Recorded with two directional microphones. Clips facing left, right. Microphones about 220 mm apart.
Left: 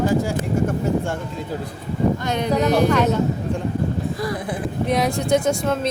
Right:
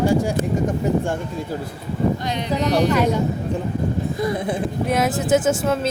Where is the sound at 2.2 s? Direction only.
50° left (ahead or behind).